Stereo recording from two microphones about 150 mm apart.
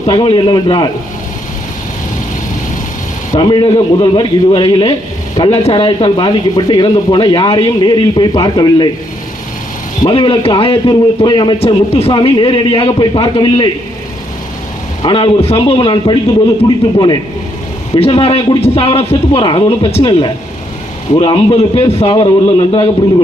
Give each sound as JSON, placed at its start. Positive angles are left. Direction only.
{"t": 0.1, "sound": "speech", "side_deg": 35}
{"t": 3.3, "sound": "speech", "side_deg": 35}
{"t": 10.0, "sound": "speech", "side_deg": 35}
{"t": 11.6, "sound": "speech", "side_deg": 45}
{"t": 15.0, "sound": "speech", "side_deg": 35}
{"t": 18.0, "sound": "speech", "side_deg": 40}